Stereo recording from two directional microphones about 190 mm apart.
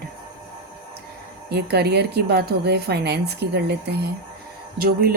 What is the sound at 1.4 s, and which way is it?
A woman's voice, 60° right (ahead or behind).